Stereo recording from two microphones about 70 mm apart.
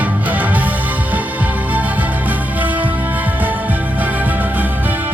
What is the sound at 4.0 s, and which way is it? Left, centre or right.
Music, right.